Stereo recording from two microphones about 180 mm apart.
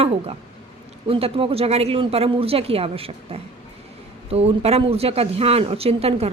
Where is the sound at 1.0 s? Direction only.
30° right (ahead or behind).